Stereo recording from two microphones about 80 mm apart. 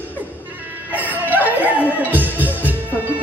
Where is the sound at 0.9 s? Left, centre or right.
Right.